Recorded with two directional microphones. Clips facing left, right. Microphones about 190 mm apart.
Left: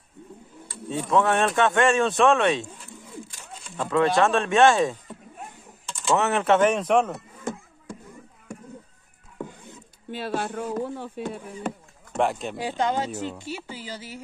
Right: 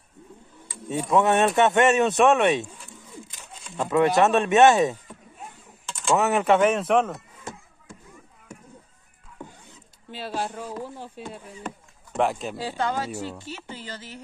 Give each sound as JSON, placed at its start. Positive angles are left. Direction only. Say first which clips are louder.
{"t": 0.7, "sound": "speech", "louder": "right 1 dB", "side_deg": -15}
{"t": 3.7, "sound": "speech", "louder": "right 1 dB", "side_deg": -15}
{"t": 6.0, "sound": "speech", "louder": "right 1 dB", "side_deg": -10}
{"t": 10.1, "sound": "speech", "louder": "left 2 dB", "side_deg": 55}
{"t": 12.1, "sound": "speech", "louder": "even", "side_deg": 0}
{"t": 12.5, "sound": "speech", "louder": "left 2 dB", "side_deg": 15}